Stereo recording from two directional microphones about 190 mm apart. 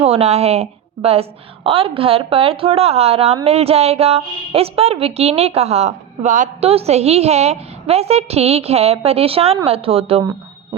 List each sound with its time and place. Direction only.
0.0 s a woman's voice: 35° right (ahead or behind)